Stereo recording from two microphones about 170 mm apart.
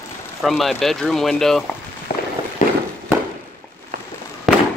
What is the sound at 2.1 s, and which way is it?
Fireworks, 65° left (ahead or behind).